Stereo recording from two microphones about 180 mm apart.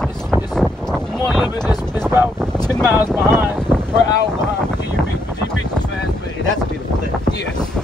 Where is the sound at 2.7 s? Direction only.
20° left (ahead or behind).